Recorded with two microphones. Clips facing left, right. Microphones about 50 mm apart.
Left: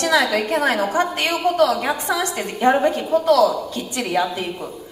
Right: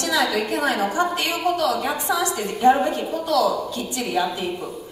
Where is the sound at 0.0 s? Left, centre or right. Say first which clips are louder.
Left 3 dB; left.